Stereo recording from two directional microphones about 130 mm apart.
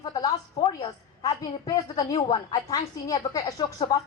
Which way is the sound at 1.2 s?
30° left (ahead or behind).